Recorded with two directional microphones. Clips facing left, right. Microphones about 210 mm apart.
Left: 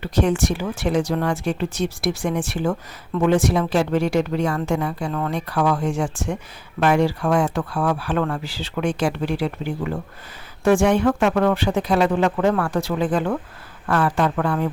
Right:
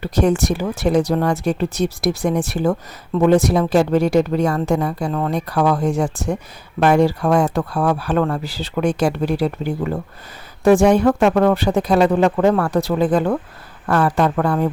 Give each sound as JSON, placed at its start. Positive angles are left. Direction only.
{"t": 0.0, "sound": "speech", "side_deg": -40}